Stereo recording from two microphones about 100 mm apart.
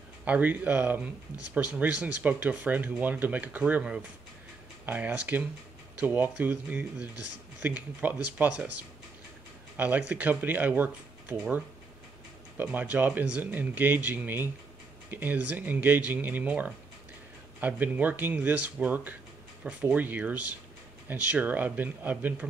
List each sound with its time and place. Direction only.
0.2 s speech: 15° right (ahead or behind)
9.8 s speech: 15° right (ahead or behind)